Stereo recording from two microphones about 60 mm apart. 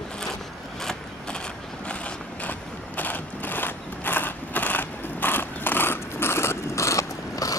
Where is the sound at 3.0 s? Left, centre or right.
Left.